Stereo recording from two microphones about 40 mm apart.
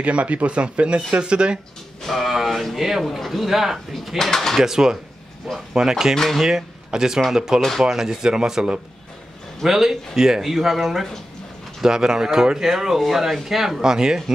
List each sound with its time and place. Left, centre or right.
0.0 s speech: right
2.0 s speech: centre
4.2 s speech: centre
4.6 s speech: centre
9.7 s speech: centre
11.8 s speech: centre